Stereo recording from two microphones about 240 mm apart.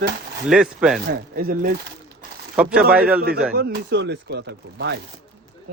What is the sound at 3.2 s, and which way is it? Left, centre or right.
Speech, right.